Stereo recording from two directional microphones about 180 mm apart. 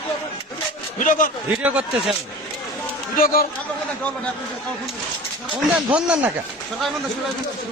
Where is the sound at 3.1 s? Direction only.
55° left (ahead or behind).